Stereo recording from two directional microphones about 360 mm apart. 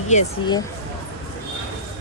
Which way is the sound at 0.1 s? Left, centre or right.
Centre.